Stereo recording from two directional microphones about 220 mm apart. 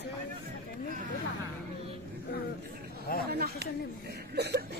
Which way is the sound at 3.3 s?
45° right (ahead or behind).